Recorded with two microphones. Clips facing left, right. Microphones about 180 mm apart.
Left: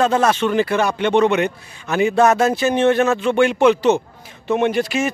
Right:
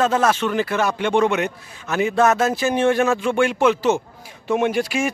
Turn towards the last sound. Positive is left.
turn(degrees=-10)  # may be behind; listen again after turning